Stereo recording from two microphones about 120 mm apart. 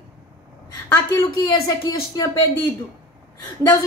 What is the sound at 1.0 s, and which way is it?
A woman's voice, 25° left (ahead or behind).